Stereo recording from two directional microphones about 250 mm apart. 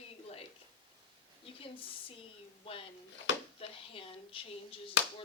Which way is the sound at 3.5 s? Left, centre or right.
Left.